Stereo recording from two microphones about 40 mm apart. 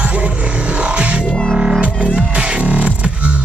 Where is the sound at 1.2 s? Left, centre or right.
Centre.